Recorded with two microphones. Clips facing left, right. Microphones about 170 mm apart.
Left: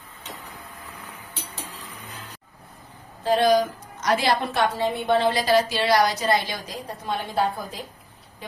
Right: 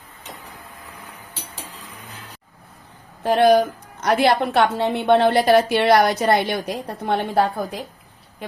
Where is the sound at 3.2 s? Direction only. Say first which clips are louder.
Right 4 dB; 60° right (ahead or behind).